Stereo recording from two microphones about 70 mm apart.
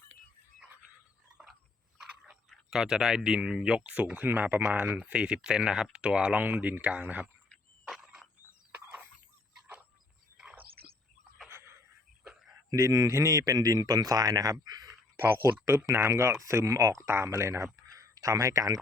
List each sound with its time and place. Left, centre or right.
2.0 s speech: centre; by 7.3 s right
7.9 s frog: centre
8.7 s a sound: right
11.4 s a sound: right
12.7 s speech: right
15.2 s speech: right
17.1 s speech: right